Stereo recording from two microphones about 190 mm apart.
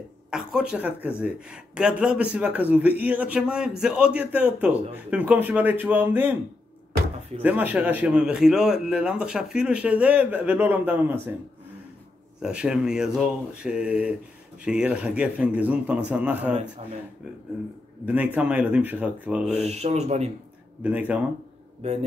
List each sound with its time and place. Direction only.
0.3 s a man's voice: 5° right (ahead or behind)
7.4 s a man's voice: 10° right (ahead or behind)
12.4 s a man's voice: 5° right (ahead or behind)
18.0 s a man's voice: 10° right (ahead or behind)
19.5 s speech: 35° right (ahead or behind)
20.8 s a man's voice: 10° right (ahead or behind)